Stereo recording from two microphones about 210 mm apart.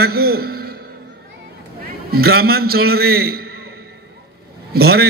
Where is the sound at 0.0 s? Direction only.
50° right (ahead or behind).